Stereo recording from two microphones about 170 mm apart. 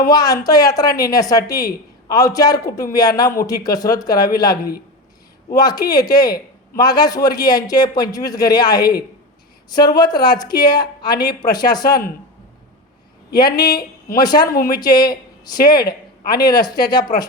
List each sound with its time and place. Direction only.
0.0 s a man's voice: 20° left (ahead or behind)
5.5 s a man's voice: 25° left (ahead or behind)
13.3 s a man's voice: 25° left (ahead or behind)
15.8 s speech: 65° left (ahead or behind)
16.4 s a man's voice: 25° left (ahead or behind)